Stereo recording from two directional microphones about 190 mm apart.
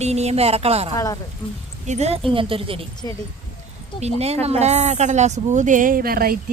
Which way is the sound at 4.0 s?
35° right (ahead or behind).